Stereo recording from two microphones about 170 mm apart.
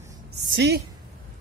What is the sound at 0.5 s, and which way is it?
Speech, 75° right (ahead or behind).